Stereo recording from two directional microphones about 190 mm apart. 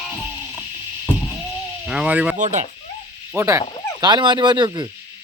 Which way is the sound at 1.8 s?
5° right (ahead or behind).